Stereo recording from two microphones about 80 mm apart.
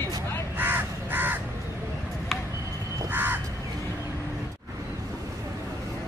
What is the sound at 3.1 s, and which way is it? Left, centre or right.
Crow, right.